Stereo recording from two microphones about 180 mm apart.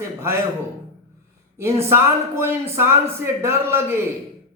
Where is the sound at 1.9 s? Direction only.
15° right (ahead or behind).